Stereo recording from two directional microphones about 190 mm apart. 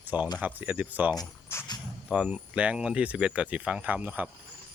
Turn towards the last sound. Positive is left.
turn(degrees=-10)  # may be behind; listen again after turning